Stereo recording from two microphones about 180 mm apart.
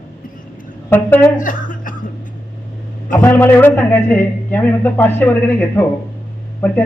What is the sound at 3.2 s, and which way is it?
A man's voice, 10° left (ahead or behind).